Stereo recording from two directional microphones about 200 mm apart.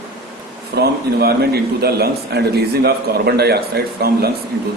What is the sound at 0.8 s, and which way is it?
A man's voice, 55° right (ahead or behind).